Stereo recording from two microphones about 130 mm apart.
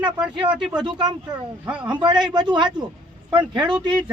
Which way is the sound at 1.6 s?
10° right (ahead or behind).